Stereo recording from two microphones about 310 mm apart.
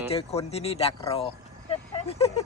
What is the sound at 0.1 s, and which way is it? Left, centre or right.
Speech, centre.